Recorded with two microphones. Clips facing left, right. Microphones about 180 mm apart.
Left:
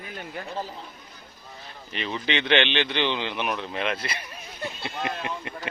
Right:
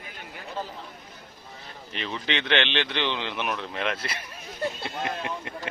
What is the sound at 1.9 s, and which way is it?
Speech, 5° left (ahead or behind).